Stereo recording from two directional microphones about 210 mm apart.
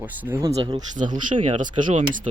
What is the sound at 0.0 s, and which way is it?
Speech, 10° right (ahead or behind).